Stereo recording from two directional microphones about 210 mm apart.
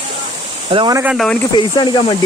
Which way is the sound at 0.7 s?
20° right (ahead or behind).